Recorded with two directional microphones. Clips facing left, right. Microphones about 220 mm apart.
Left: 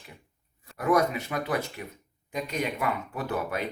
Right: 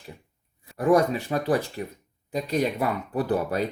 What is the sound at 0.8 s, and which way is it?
Speech, 30° right (ahead or behind).